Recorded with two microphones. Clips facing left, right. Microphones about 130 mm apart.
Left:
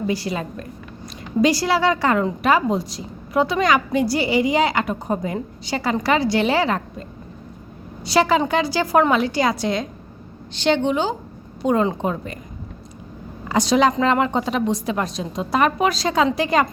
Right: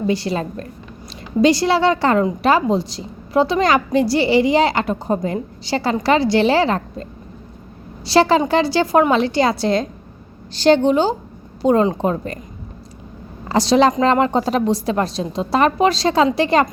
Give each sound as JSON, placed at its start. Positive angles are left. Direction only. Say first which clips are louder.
{"t": 0.1, "sound": "a woman's voice", "louder": "right 4 dB", "side_deg": -30}
{"t": 8.0, "sound": "a woman's voice", "louder": "right 3 dB", "side_deg": -30}
{"t": 13.5, "sound": "a woman's voice", "louder": "right 3 dB", "side_deg": -30}